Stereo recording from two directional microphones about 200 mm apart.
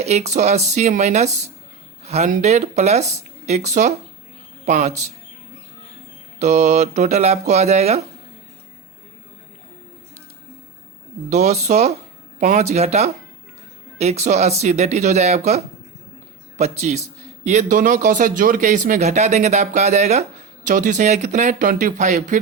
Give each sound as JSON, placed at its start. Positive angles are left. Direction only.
{"t": 0.0, "sound": "speech", "side_deg": -35}
{"t": 6.4, "sound": "speech", "side_deg": -35}
{"t": 11.3, "sound": "speech", "side_deg": -35}